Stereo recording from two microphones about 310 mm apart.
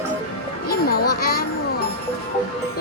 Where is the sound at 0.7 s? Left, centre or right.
Left.